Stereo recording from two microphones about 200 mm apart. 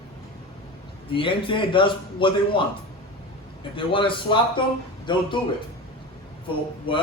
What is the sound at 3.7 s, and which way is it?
A man's voice, 25° left (ahead or behind).